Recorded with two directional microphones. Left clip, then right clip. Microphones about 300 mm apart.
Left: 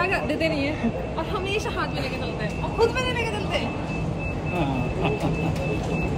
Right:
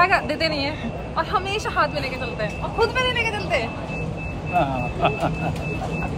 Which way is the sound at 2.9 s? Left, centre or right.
Centre.